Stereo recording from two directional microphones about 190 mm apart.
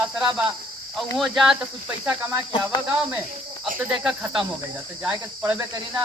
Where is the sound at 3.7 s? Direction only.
5° right (ahead or behind).